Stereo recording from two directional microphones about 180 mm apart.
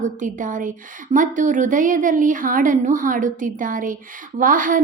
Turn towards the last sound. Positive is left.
turn(degrees=-50)  # may be behind; listen again after turning